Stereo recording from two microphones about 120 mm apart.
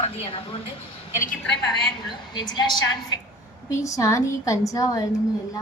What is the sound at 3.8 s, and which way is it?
Speech, 25° left (ahead or behind).